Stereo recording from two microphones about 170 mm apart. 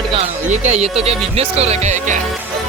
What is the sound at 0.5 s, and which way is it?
Music, 40° right (ahead or behind).